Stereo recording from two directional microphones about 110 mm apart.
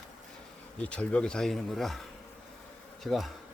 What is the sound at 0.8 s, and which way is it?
Speech, 10° left (ahead or behind).